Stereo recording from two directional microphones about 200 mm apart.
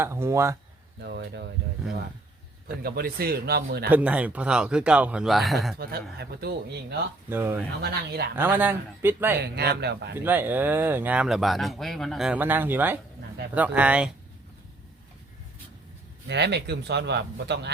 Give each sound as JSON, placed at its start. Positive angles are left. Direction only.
{"t": 0.0, "sound": "speech", "side_deg": -15}
{"t": 1.0, "sound": "speech", "side_deg": -55}
{"t": 2.6, "sound": "a man's voice", "side_deg": -50}
{"t": 3.8, "sound": "speech", "side_deg": -5}
{"t": 5.7, "sound": "a man's voice", "side_deg": -50}
{"t": 7.3, "sound": "speech", "side_deg": -10}
{"t": 7.8, "sound": "a man's voice", "side_deg": -50}
{"t": 8.4, "sound": "speech", "side_deg": -10}
{"t": 9.4, "sound": "speech", "side_deg": -55}
{"t": 10.2, "sound": "speech", "side_deg": -10}
{"t": 16.3, "sound": "speech", "side_deg": -60}